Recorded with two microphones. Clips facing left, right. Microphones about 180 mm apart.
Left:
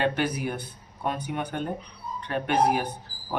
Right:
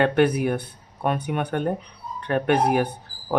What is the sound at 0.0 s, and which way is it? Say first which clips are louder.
Speech: right 7 dB; 60° right (ahead or behind).